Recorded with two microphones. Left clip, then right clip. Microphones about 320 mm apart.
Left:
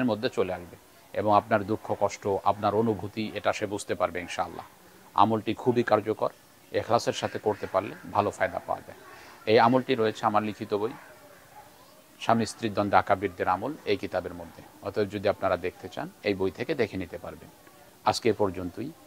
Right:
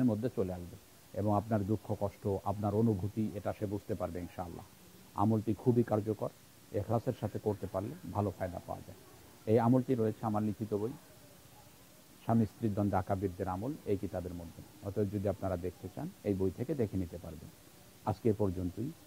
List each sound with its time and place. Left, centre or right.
0.2 s speech: centre
3.2 s speech: centre
12.3 s speech: centre